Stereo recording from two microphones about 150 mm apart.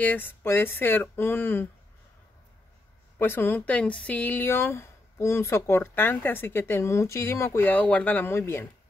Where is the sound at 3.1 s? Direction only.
15° left (ahead or behind).